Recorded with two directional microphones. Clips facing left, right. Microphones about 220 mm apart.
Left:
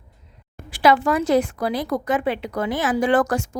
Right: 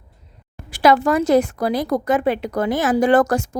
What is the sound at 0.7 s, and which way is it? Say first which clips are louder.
A woman's voice: right 2 dB; 45° right (ahead or behind).